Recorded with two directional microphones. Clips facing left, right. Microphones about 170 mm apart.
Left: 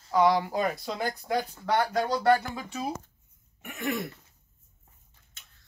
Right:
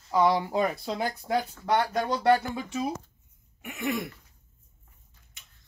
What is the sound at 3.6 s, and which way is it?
Throat clearing, 15° right (ahead or behind).